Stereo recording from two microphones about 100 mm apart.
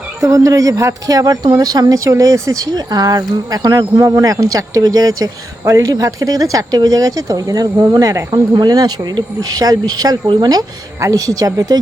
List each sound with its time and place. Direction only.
0.2 s speech: 35° right (ahead or behind)